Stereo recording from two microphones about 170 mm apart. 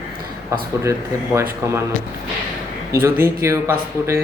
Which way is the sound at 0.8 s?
15° right (ahead or behind).